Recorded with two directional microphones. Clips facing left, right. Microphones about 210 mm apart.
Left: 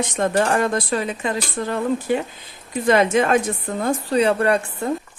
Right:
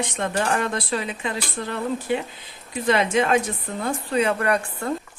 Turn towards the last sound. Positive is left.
turn(degrees=25)  # may be behind; listen again after turning